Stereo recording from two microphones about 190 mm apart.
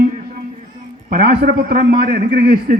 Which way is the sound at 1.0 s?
55° right (ahead or behind).